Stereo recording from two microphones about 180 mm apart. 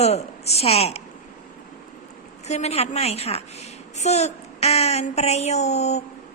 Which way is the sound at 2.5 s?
35° left (ahead or behind).